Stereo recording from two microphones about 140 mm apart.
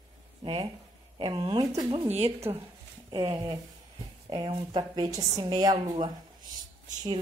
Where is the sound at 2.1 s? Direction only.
45° right (ahead or behind).